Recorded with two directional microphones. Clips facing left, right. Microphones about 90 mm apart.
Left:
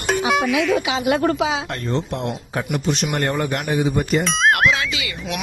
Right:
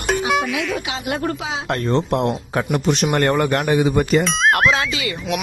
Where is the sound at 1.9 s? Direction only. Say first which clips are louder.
Right 5 dB; 50° right (ahead or behind); by 4.0 s 80° right.